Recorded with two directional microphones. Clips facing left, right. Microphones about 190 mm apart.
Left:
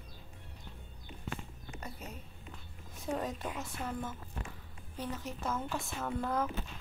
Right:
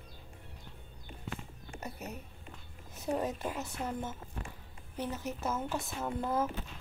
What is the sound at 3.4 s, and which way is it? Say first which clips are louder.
Speech: right 3 dB; 5° right (ahead or behind).